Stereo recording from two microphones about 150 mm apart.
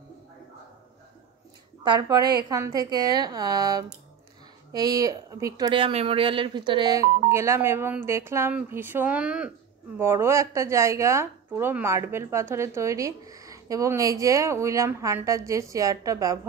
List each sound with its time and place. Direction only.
1.8 s speech: 30° right (ahead or behind)
5.7 s speech: 35° right (ahead or behind)